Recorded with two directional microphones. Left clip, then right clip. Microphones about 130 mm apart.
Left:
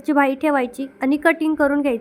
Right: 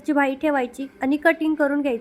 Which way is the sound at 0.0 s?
15° left (ahead or behind).